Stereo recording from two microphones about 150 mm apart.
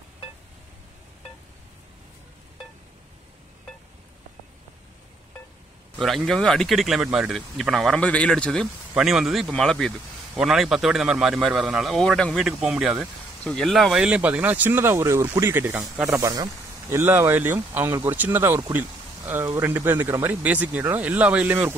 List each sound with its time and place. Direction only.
5.9 s speech: centre (ahead or behind)